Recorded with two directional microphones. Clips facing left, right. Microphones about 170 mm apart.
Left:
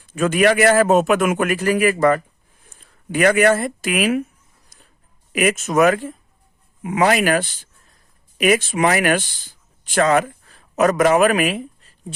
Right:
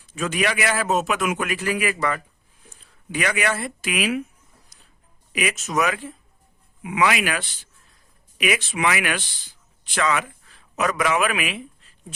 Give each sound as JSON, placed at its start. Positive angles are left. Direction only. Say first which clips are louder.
{"t": 0.0, "sound": "a man's voice", "louder": "left 8 dB", "side_deg": 55}
{"t": 4.7, "sound": "a sound", "louder": "left 4 dB", "side_deg": 50}
{"t": 5.3, "sound": "a man's voice", "louder": "left 7 dB", "side_deg": 50}